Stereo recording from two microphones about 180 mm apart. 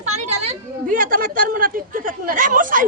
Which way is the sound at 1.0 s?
50° right (ahead or behind).